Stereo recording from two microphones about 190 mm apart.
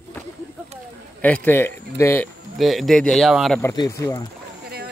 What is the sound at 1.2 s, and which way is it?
Speech, 10° left (ahead or behind).